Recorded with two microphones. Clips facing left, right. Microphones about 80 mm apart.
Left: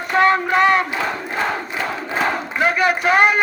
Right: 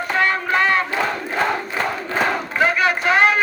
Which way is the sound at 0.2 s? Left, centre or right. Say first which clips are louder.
Left 5 dB; left.